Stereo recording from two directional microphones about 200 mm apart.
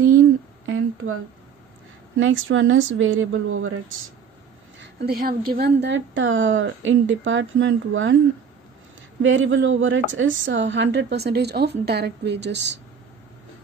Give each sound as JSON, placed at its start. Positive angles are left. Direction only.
{"t": 0.7, "sound": "a sound", "side_deg": -85}
{"t": 2.1, "sound": "speech", "side_deg": -75}
{"t": 4.7, "sound": "speech", "side_deg": -50}
{"t": 9.2, "sound": "a woman's voice", "side_deg": -75}